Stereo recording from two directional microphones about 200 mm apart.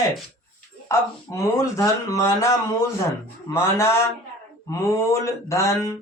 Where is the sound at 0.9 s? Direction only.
15° left (ahead or behind).